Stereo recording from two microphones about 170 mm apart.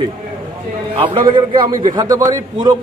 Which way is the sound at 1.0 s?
30° right (ahead or behind).